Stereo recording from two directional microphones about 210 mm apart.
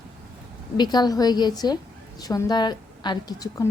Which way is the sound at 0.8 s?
20° left (ahead or behind).